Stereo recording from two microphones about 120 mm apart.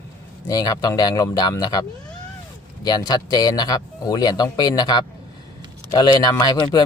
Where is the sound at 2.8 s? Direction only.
35° left (ahead or behind).